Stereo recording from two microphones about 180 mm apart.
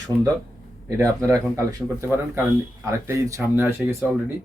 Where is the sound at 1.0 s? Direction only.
15° right (ahead or behind).